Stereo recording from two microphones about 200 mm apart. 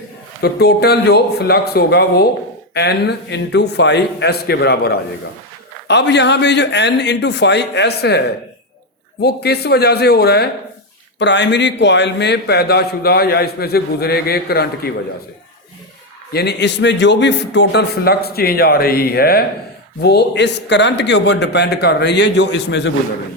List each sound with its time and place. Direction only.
0.4 s speech: 55° left (ahead or behind)
9.2 s speech: 55° left (ahead or behind)
16.3 s speech: 55° left (ahead or behind)